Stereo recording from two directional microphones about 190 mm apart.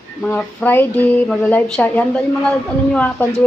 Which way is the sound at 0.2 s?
10° left (ahead or behind).